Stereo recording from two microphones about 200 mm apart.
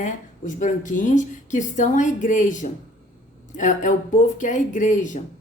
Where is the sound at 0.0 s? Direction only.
40° left (ahead or behind).